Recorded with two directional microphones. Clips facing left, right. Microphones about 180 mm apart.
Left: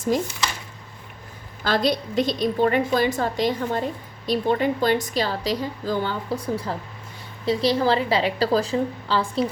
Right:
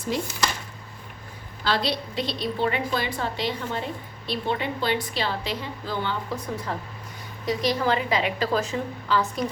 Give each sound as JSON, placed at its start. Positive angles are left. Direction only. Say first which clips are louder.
{"t": 0.1, "sound": "a woman's voice", "louder": "left 4 dB", "side_deg": 45}
{"t": 1.6, "sound": "a woman's voice", "louder": "left 4 dB", "side_deg": 45}